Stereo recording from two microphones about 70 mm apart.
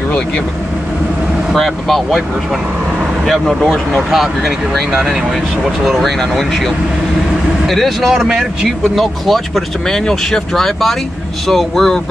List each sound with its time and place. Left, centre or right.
1.5 s speech: centre
3.3 s speech: centre